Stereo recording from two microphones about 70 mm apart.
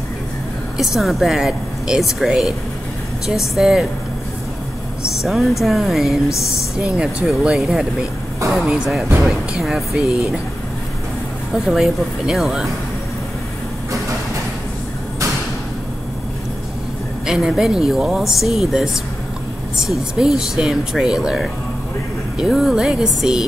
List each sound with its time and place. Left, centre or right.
0.7 s speech: centre
5.0 s speech: centre
9.9 s speech: centre
11.5 s speech: centre
17.3 s speech: centre